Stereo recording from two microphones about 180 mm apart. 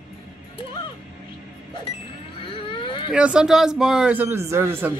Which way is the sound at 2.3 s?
30° left (ahead or behind).